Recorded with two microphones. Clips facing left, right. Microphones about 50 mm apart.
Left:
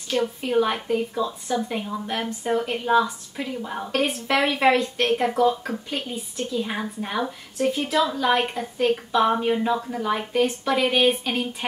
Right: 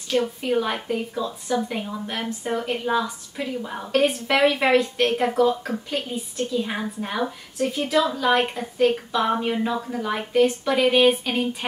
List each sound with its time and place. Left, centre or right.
0.1 s a woman's voice: centre